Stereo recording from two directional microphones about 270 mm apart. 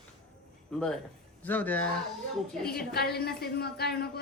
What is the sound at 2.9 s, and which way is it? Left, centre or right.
Speech, left.